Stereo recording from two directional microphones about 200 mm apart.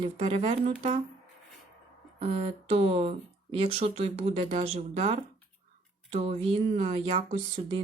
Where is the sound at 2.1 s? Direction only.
30° right (ahead or behind).